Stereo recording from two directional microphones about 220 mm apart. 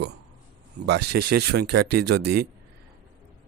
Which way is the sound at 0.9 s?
50° right (ahead or behind).